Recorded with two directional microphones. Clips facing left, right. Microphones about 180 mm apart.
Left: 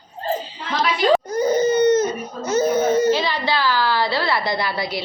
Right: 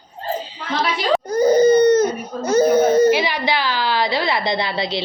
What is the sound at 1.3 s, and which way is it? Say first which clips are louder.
Baby cry: right 5 dB; 35° right (ahead or behind).